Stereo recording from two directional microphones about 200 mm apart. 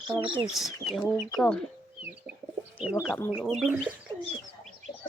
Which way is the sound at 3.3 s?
5° right (ahead or behind).